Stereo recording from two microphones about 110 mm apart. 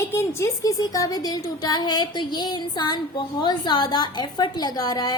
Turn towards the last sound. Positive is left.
turn(degrees=35)  # may be behind; listen again after turning